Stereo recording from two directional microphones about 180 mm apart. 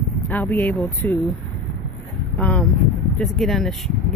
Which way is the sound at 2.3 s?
10° left (ahead or behind).